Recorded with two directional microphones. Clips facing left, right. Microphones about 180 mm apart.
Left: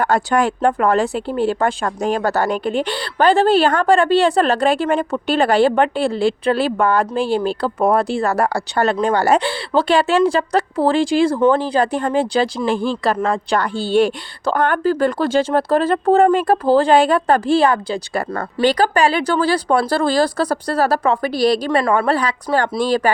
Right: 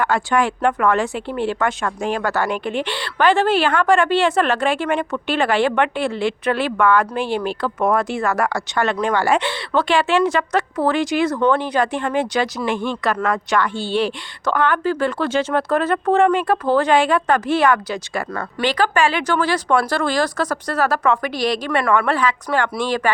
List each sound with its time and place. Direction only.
0.0 s speech: 40° left (ahead or behind)